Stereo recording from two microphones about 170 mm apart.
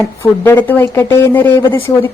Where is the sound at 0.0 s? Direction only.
15° left (ahead or behind).